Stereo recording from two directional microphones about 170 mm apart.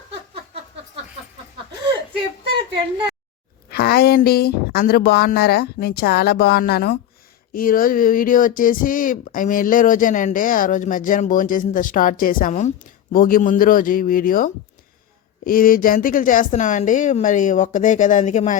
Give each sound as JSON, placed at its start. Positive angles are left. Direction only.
{"t": 3.7, "sound": "speech", "side_deg": 65}